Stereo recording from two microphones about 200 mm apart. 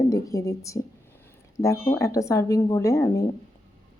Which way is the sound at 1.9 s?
15° left (ahead or behind).